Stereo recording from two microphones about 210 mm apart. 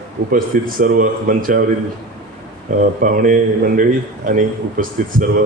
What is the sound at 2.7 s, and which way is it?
Speech, 40° right (ahead or behind).